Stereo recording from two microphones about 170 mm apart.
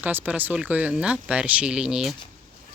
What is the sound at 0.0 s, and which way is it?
Speech, 10° right (ahead or behind).